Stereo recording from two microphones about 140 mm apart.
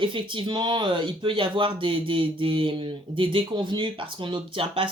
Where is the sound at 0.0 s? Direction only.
35° right (ahead or behind).